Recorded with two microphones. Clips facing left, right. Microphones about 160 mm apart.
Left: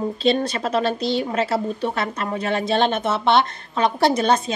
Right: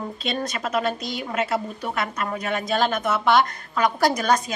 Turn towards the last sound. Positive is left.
turn(degrees=25)  # may be behind; listen again after turning